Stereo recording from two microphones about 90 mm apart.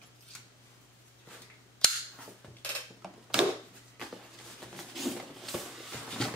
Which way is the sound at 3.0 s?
5° right (ahead or behind).